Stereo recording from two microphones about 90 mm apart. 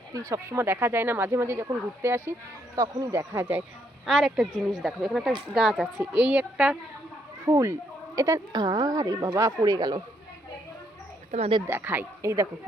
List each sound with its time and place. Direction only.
0.1 s speech: 35° right (ahead or behind)
2.7 s speech: 40° right (ahead or behind)
4.0 s speech: 5° right (ahead or behind)
6.0 s a woman's voice: 15° right (ahead or behind)
7.4 s speech: 35° right (ahead or behind)
8.5 s speech: 50° right (ahead or behind)
11.6 s speech: 25° right (ahead or behind)